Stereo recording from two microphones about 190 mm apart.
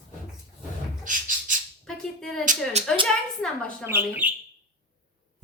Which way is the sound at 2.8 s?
35° right (ahead or behind).